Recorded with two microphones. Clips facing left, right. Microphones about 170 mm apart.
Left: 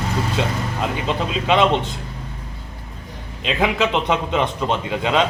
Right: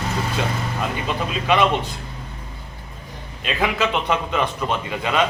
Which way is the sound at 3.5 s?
20° left (ahead or behind).